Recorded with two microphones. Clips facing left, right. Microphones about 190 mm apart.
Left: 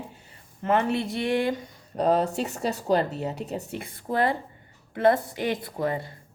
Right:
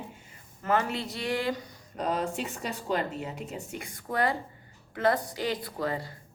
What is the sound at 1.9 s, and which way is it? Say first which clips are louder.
A woman's voice: left 7 dB; 40° left (ahead or behind).